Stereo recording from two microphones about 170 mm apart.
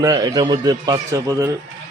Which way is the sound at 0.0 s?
20° right (ahead or behind).